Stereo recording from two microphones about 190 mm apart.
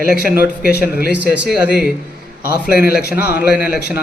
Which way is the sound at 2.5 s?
55° left (ahead or behind).